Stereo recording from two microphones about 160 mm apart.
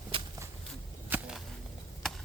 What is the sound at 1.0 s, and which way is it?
Whip, 10° right (ahead or behind).